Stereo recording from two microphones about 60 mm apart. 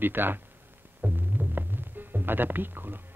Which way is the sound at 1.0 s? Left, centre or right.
Right.